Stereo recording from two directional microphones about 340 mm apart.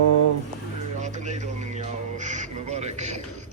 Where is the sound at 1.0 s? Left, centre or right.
Right.